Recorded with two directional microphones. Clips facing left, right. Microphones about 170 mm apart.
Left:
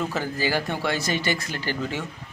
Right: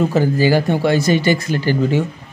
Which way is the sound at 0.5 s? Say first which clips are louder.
Right 10 dB; 35° right (ahead or behind).